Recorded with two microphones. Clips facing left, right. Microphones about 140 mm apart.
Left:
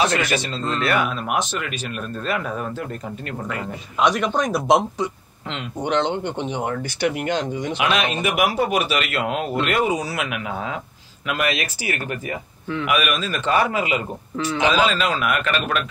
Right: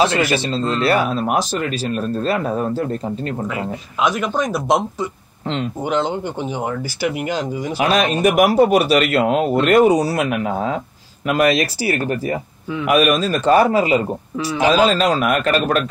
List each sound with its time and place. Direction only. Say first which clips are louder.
0.3 s a man's voice: right 5 dB; 30° right (ahead or behind)
3.4 s speech: right 4 dB; centre (ahead or behind)
7.7 s a man's voice: right 6 dB; 35° right (ahead or behind)